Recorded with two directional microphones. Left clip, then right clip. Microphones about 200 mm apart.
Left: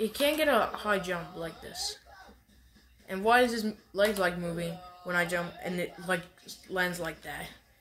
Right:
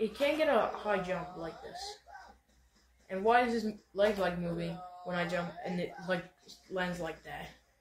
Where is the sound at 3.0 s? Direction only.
55° left (ahead or behind).